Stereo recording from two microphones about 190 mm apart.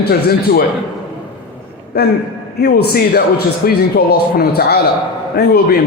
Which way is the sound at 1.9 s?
55° left (ahead or behind).